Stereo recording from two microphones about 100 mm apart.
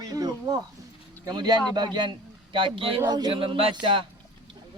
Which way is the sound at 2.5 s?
60° right (ahead or behind).